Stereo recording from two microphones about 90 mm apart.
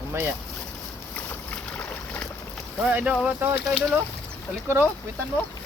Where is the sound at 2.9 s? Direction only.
10° right (ahead or behind).